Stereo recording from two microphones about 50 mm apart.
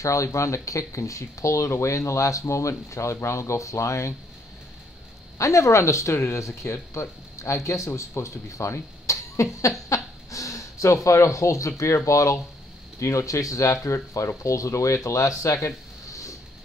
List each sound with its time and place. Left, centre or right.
0.0 s speech: left
5.4 s speech: left
9.8 s a sound: left
11.1 s speech: left